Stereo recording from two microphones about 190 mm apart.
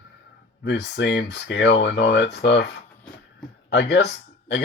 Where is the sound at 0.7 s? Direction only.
65° left (ahead or behind).